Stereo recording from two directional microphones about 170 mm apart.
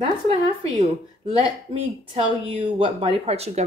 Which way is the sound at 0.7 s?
30° right (ahead or behind).